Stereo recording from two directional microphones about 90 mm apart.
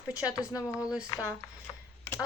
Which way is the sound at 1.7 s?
35° left (ahead or behind).